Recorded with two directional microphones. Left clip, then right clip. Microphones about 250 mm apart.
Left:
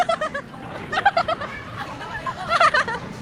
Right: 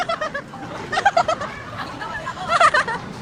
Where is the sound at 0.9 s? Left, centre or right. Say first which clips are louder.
Right 2 dB; centre.